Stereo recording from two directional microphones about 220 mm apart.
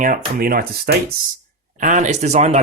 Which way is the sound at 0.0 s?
40° right (ahead or behind).